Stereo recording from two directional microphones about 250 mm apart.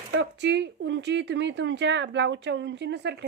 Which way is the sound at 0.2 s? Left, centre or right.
Right.